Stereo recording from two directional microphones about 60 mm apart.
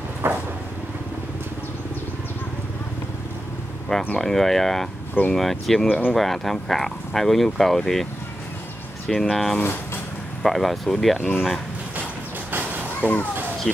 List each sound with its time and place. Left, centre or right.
0.2 s vehicle: right
4.2 s speech: centre
5.9 s speech: left
6.1 s speech: centre
13.0 s speech: left